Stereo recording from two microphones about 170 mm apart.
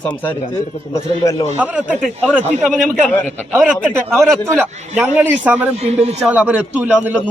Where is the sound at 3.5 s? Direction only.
15° right (ahead or behind).